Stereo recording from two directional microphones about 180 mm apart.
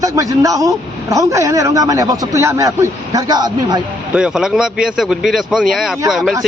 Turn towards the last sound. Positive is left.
turn(degrees=0)  # may be behind; listen again after turning